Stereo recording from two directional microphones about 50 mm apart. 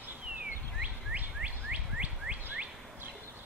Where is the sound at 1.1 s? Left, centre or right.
Right.